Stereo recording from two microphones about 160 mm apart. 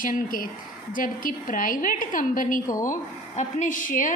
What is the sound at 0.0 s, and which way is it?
A woman's voice, 60° left (ahead or behind).